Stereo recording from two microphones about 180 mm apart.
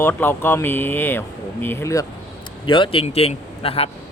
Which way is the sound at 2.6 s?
30° left (ahead or behind).